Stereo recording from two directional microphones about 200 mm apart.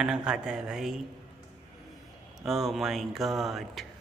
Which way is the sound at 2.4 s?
Centre (ahead or behind).